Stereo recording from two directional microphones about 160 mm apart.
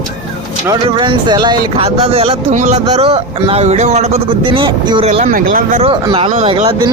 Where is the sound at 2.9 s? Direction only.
40° right (ahead or behind).